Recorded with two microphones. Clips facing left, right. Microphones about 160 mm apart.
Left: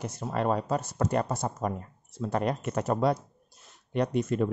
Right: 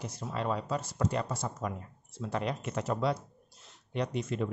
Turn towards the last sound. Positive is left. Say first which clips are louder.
# left 6 dB
turn(degrees=50)  # may be behind; listen again after turning